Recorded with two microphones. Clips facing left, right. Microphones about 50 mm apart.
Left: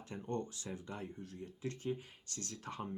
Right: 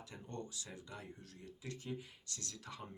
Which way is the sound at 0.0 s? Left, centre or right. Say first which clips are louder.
Left 7 dB; left.